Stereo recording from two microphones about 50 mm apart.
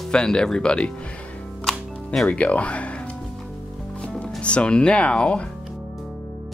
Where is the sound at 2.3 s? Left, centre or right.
Left.